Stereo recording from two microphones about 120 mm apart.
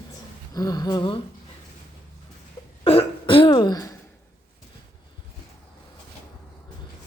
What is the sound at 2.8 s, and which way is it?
Throat clearing, 50° left (ahead or behind).